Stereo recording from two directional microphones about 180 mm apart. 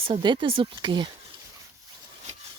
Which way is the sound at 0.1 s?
25° right (ahead or behind).